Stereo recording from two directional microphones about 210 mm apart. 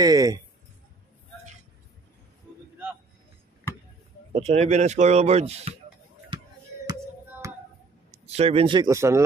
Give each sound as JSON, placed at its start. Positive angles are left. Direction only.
{"t": 0.0, "sound": "speech", "side_deg": -15}
{"t": 4.3, "sound": "a man's voice", "side_deg": -30}
{"t": 8.1, "sound": "speech", "side_deg": -30}